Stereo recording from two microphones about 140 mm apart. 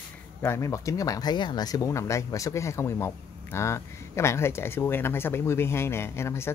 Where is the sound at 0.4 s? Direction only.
20° left (ahead or behind).